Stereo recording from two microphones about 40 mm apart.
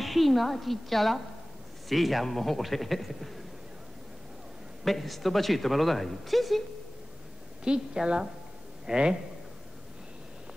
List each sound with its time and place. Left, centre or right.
0.0 s a woman's voice: centre
4.8 s a woman's voice: centre
7.6 s a woman's voice: centre